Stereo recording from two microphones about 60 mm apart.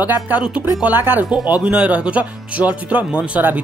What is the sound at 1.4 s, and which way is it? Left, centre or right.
A woman's voice, centre.